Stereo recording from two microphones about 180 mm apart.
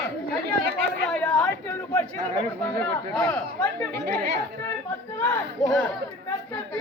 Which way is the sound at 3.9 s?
60° right (ahead or behind).